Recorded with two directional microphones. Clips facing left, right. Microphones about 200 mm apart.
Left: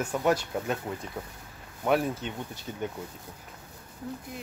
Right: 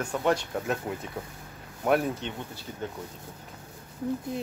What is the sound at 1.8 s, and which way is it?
Speech, centre (ahead or behind).